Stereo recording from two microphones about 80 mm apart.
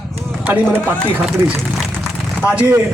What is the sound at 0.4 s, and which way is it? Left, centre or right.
Speech, right.